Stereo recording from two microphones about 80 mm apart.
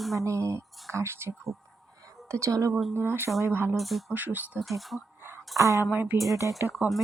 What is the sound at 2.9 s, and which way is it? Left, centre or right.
Speech, right.